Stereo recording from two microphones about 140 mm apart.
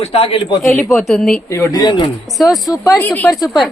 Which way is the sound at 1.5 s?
20° left (ahead or behind).